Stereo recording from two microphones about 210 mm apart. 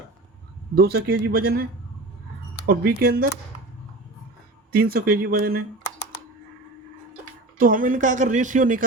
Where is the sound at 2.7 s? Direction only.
45° right (ahead or behind).